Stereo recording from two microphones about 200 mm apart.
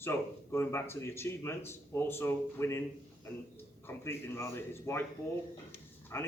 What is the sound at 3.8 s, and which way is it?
Speech, 10° left (ahead or behind).